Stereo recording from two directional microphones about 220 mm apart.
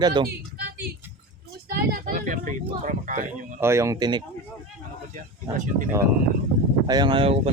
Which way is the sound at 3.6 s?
10° right (ahead or behind).